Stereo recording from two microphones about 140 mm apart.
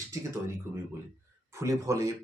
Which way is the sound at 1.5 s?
20° right (ahead or behind).